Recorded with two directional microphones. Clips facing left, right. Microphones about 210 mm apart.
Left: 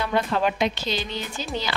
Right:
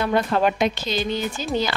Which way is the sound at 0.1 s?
45° right (ahead or behind).